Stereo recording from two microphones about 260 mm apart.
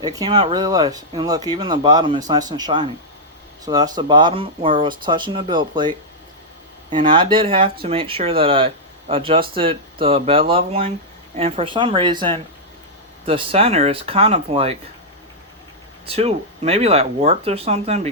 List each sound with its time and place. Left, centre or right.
0.0 s speech: centre
6.9 s speech: centre
16.0 s speech: right